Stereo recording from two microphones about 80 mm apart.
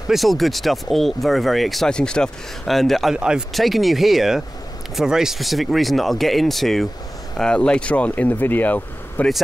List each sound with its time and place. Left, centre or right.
0.1 s speech: centre
3.2 s speech: centre; by 9.3 s left